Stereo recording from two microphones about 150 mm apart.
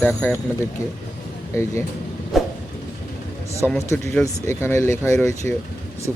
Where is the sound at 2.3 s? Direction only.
Centre (ahead or behind).